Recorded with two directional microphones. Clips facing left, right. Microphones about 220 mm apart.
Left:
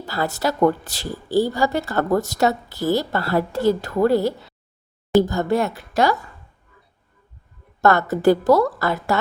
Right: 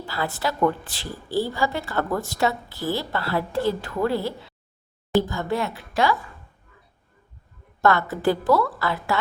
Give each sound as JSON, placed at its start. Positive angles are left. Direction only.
{"t": 0.0, "sound": "a woman's voice", "side_deg": 40}
{"t": 7.8, "sound": "a woman's voice", "side_deg": 45}